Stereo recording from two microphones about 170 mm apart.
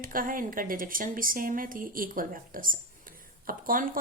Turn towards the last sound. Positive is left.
turn(degrees=-55)  # may be behind; listen again after turning